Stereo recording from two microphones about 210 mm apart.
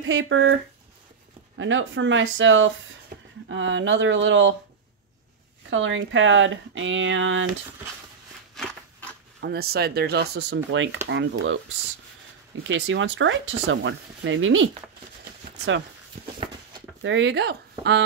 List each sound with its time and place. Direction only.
0.0 s speech: 65° right (ahead or behind)
1.6 s speech: 65° right (ahead or behind)
3.1 s a sound: 45° right (ahead or behind)
3.4 s speech: 65° right (ahead or behind)
5.7 s speech: 65° right (ahead or behind)
8.5 s a sound: 5° left (ahead or behind)
9.4 s speech: 50° right (ahead or behind)
12.6 s speech: 60° right (ahead or behind)
17.0 s speech: 60° right (ahead or behind)